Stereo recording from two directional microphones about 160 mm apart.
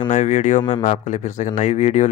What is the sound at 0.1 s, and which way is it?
Speech, 50° left (ahead or behind).